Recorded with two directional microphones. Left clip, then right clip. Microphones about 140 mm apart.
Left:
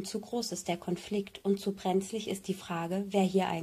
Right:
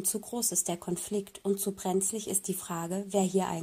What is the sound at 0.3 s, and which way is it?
Speech, 35° right (ahead or behind).